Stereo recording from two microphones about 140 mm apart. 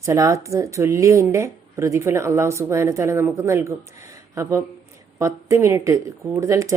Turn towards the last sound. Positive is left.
turn(degrees=-20)  # may be behind; listen again after turning